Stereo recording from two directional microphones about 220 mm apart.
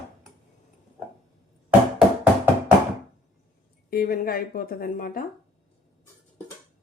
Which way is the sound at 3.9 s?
40° left (ahead or behind).